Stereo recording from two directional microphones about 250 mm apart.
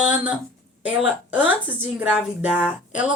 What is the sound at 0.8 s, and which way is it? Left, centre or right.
Speech, centre.